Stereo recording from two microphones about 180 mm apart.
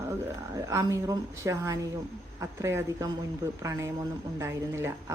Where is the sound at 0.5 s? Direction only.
20° right (ahead or behind).